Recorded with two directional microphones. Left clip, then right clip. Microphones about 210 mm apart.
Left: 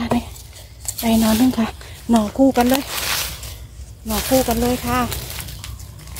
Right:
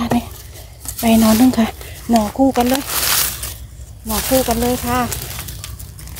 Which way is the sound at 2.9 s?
35° right (ahead or behind).